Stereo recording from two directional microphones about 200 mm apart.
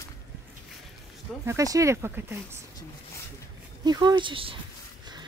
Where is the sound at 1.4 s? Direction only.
15° right (ahead or behind).